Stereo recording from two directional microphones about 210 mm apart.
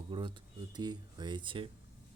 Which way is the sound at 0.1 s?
25° right (ahead or behind).